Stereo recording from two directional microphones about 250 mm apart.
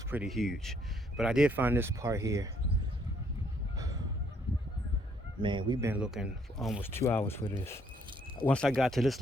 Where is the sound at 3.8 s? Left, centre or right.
Centre.